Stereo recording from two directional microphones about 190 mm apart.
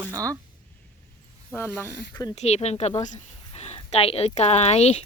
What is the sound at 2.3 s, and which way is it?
Speech, 35° left (ahead or behind).